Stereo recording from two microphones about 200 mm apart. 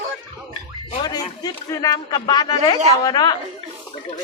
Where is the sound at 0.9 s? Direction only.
20° left (ahead or behind).